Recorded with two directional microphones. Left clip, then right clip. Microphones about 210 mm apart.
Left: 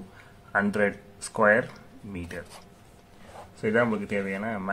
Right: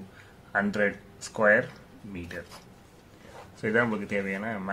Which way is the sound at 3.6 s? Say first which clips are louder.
Left 1 dB; centre (ahead or behind).